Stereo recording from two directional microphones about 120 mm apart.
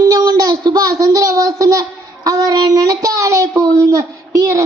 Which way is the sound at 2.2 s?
35° right (ahead or behind).